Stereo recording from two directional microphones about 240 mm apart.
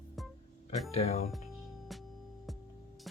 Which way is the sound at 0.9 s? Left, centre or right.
Left.